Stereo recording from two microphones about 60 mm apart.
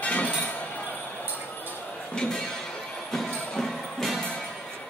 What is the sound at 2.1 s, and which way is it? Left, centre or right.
Speech, centre.